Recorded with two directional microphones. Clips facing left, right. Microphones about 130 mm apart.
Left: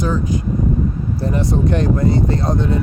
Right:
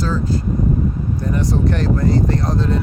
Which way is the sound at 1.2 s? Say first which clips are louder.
Left 1 dB; 25° left (ahead or behind).